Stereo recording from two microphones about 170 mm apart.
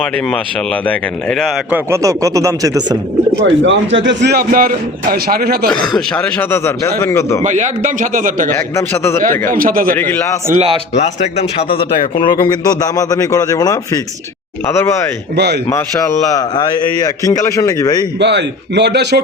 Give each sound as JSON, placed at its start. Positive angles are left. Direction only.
{"t": 1.7, "sound": "speech", "side_deg": -15}
{"t": 3.4, "sound": "a man's voice", "side_deg": -90}
{"t": 6.1, "sound": "a man's voice", "side_deg": 10}
{"t": 7.4, "sound": "a man's voice", "side_deg": -45}
{"t": 8.7, "sound": "a man's voice", "side_deg": 15}
{"t": 9.5, "sound": "a man's voice", "side_deg": -55}
{"t": 10.0, "sound": "a man's voice", "side_deg": 10}
{"t": 10.5, "sound": "speech", "side_deg": -35}
{"t": 10.9, "sound": "a man's voice", "side_deg": 40}
{"t": 18.2, "sound": "a man's voice", "side_deg": -90}